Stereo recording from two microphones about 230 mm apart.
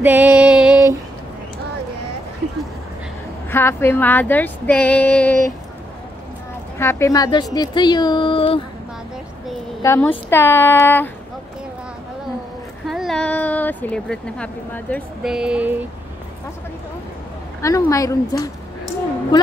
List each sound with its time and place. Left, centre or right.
0.0 s music: centre
3.4 s speech: centre
6.8 s a woman's voice: centre
9.8 s speech: centre
12.8 s speech: centre
17.6 s speech: centre